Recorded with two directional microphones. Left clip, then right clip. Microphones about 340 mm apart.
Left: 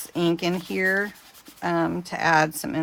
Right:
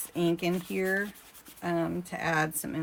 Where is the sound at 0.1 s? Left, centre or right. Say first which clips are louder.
Left 5 dB; centre.